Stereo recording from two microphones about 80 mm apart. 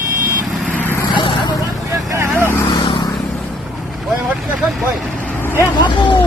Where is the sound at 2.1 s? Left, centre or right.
Right.